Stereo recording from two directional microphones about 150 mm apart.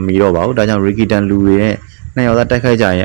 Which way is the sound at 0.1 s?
20° right (ahead or behind).